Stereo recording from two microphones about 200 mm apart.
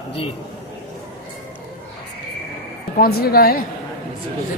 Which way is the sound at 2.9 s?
50° left (ahead or behind).